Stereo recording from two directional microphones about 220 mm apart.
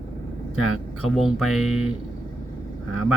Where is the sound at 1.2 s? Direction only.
Centre (ahead or behind).